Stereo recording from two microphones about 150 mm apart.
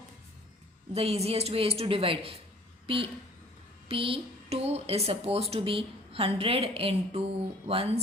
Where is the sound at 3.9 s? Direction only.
35° right (ahead or behind).